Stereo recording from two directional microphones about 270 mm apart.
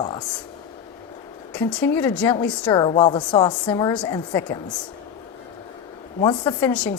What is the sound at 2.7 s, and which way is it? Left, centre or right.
A woman's voice, centre.